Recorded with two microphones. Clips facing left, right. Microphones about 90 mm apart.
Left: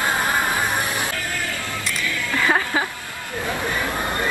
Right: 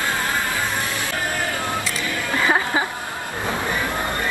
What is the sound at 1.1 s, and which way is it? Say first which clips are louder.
Music: right 3 dB; 25° right (ahead or behind).